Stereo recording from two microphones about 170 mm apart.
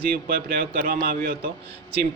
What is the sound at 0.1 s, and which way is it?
A man's voice, 60° right (ahead or behind).